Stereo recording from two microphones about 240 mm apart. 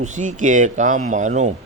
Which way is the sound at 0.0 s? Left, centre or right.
Right.